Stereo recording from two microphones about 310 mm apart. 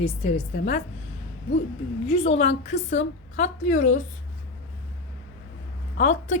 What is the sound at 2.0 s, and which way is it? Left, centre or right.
A woman's voice, centre.